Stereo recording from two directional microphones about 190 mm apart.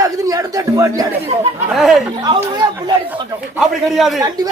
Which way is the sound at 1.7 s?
Centre (ahead or behind).